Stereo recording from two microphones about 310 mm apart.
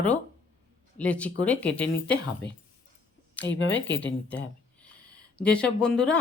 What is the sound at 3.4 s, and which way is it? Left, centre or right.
Speech, left.